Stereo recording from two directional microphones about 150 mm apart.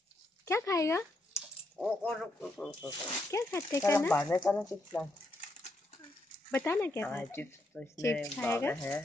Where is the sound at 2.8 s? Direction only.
20° left (ahead or behind).